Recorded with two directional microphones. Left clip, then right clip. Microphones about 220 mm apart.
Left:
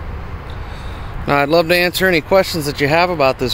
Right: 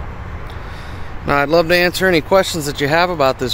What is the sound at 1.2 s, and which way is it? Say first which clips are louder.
Speech: even; 5° left (ahead or behind).